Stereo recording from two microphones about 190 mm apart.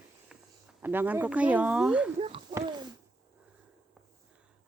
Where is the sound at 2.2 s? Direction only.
30° right (ahead or behind).